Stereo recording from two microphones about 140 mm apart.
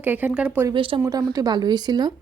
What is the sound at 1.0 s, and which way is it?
A woman's voice, 25° right (ahead or behind).